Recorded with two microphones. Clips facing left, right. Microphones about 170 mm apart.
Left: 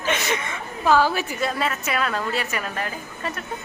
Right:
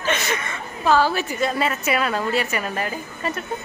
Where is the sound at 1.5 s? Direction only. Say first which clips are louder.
Right 3 dB; centre (ahead or behind).